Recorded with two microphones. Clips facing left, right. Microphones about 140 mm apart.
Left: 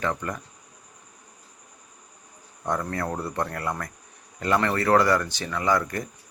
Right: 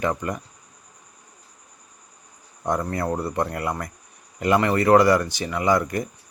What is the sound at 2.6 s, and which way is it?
Speech, 15° right (ahead or behind).